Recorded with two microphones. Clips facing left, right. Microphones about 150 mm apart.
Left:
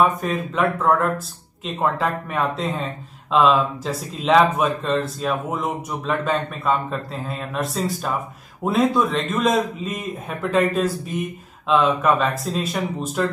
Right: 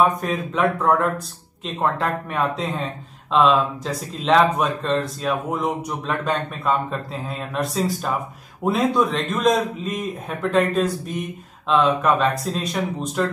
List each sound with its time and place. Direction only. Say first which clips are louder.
0.0 s speech: even; centre (ahead or behind)